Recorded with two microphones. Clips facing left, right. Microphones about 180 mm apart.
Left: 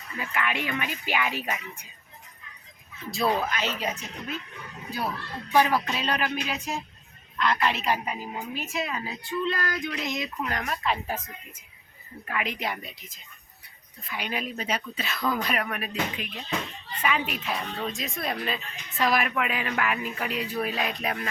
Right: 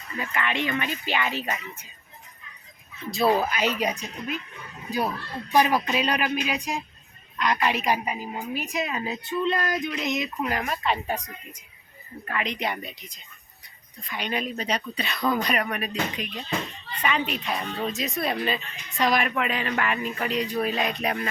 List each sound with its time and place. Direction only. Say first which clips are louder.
0.2 s speech: right 2 dB; 5° left (ahead or behind)
3.1 s speech: right 4 dB; centre (ahead or behind)
3.4 s a woman's voice: right 4 dB; 10° right (ahead or behind)
10.5 s speech: right 1 dB; 5° right (ahead or behind)